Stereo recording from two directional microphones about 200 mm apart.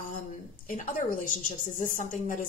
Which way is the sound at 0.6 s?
40° left (ahead or behind).